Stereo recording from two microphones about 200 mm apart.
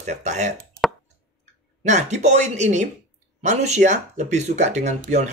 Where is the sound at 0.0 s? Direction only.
35° right (ahead or behind).